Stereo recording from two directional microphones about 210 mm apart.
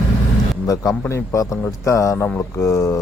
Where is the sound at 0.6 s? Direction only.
15° left (ahead or behind).